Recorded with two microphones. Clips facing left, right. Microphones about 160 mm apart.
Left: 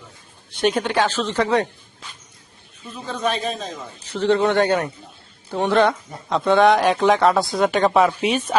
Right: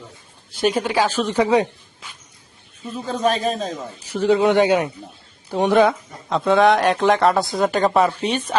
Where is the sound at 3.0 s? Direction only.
40° right (ahead or behind).